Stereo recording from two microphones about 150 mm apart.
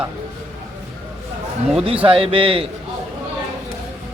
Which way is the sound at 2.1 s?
40° right (ahead or behind).